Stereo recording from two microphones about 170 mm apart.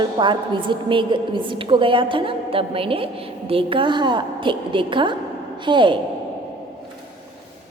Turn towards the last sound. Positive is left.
turn(degrees=-30)  # may be behind; listen again after turning